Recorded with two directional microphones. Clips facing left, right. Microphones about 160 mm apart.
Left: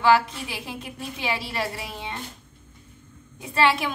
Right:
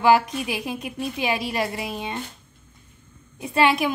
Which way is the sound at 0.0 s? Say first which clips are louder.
Right 2 dB; 15° right (ahead or behind).